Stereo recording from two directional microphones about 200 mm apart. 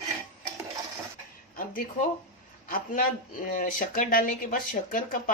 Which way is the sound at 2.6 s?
45° left (ahead or behind).